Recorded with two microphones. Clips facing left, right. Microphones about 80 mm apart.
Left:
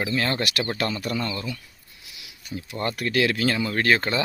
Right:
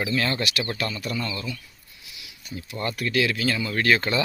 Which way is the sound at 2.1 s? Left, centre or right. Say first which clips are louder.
Left 2 dB; left.